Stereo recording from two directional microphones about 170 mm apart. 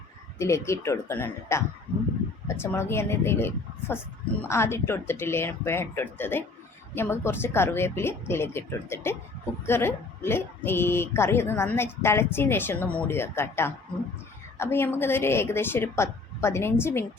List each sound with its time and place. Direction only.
0.3 s a woman's voice: 15° left (ahead or behind)